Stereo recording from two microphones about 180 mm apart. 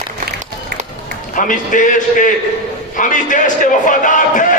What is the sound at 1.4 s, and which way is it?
A man's voice, 45° left (ahead or behind).